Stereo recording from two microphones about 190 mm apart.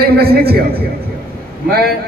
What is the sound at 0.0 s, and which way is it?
Speech, 55° right (ahead or behind).